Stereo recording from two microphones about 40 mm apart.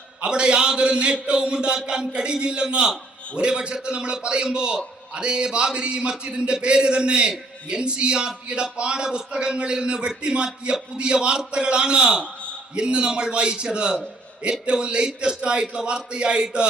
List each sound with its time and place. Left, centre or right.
0.2 s a man's voice: right
12.2 s a sound: left
12.7 s a man's voice: right